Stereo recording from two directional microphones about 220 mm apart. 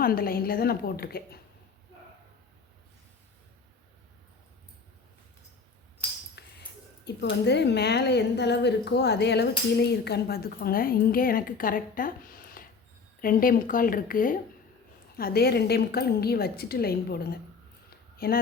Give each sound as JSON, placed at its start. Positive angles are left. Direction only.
{"t": 0.0, "sound": "a woman's voice", "side_deg": 40}
{"t": 6.4, "sound": "a sound", "side_deg": 50}
{"t": 7.0, "sound": "a woman's voice", "side_deg": 50}
{"t": 18.2, "sound": "a woman's voice", "side_deg": 40}